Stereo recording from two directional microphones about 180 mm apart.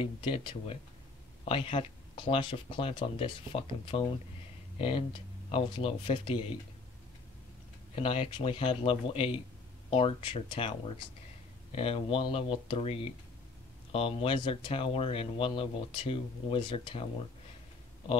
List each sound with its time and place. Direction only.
0.0 s speech: 30° left (ahead or behind)
7.9 s speech: 30° left (ahead or behind)